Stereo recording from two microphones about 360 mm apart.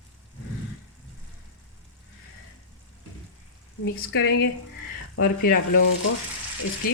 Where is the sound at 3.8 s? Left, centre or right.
Left.